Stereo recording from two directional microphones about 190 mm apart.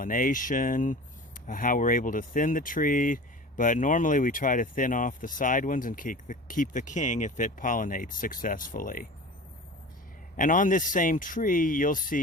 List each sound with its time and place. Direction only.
0.0 s speech: 45° left (ahead or behind)
10.3 s speech: 45° left (ahead or behind)